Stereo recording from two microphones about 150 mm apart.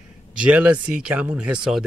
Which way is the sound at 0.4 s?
10° right (ahead or behind).